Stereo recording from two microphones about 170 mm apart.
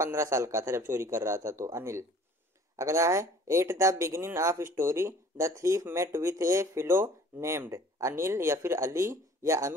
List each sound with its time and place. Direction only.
0.0 s speech: 15° right (ahead or behind)